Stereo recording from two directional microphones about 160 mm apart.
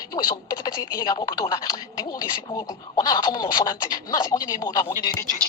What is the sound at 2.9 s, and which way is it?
Speech, 25° left (ahead or behind).